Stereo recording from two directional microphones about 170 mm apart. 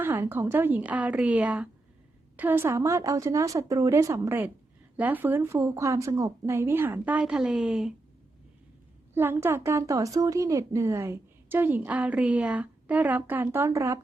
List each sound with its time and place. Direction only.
0.0 s speech: 10° right (ahead or behind)
9.1 s speech: 15° right (ahead or behind)